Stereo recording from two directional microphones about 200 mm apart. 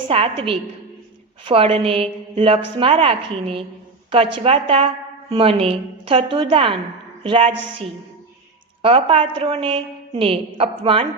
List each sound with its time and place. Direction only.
0.1 s a woman's voice: 25° right (ahead or behind)